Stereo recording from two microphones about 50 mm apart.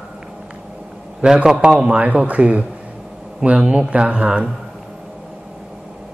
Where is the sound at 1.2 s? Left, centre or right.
Centre.